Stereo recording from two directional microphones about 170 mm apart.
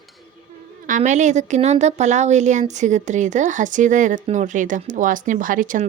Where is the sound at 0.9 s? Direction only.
45° right (ahead or behind).